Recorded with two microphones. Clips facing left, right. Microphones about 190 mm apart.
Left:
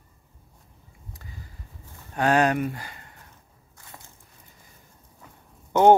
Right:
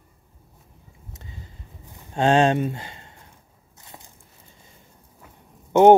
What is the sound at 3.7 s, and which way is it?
Biting, 20° right (ahead or behind).